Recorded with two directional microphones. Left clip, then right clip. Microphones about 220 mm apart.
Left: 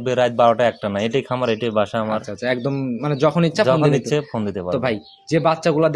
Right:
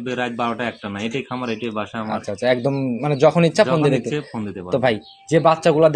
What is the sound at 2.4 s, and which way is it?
Speech, 10° right (ahead or behind).